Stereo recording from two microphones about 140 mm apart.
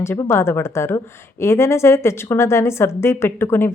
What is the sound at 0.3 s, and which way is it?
A woman's voice, 15° left (ahead or behind).